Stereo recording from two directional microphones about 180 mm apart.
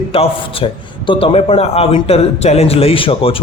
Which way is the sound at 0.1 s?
30° left (ahead or behind).